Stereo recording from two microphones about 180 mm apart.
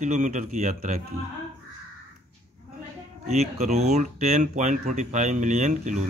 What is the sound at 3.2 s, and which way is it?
Speech, 40° right (ahead or behind).